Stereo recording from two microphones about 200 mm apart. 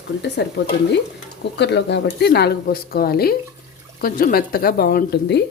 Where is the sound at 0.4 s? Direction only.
55° left (ahead or behind).